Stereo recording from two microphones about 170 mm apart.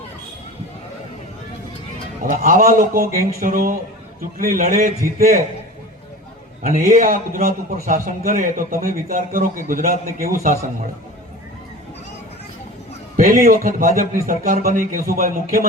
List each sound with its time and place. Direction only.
2.2 s a man's voice: 55° right (ahead or behind)
6.6 s a man's voice: 55° right (ahead or behind)
13.1 s a man's voice: 55° right (ahead or behind)